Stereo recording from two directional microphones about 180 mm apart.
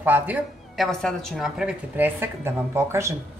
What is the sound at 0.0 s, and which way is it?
Speech, 10° right (ahead or behind).